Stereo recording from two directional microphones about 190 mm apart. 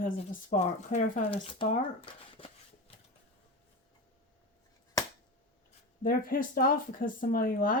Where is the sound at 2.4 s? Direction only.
30° left (ahead or behind).